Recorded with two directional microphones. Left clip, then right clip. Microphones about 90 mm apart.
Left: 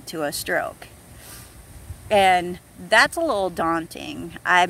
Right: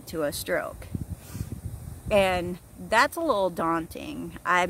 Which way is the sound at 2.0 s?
35° right (ahead or behind).